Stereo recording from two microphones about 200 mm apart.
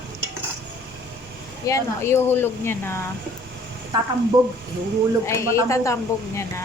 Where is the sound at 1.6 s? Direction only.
15° left (ahead or behind).